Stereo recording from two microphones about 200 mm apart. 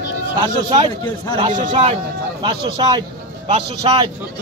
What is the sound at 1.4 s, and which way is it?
A man's voice, 25° right (ahead or behind).